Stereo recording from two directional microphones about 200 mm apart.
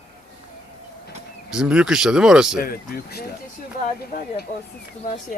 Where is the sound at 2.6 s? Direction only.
45° left (ahead or behind).